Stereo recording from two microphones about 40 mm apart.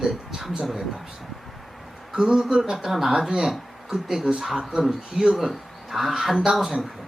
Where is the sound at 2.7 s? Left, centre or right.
Centre.